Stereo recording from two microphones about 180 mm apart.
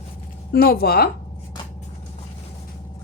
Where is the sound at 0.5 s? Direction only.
55° left (ahead or behind).